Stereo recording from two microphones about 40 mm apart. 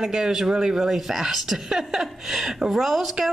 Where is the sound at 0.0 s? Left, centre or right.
Centre.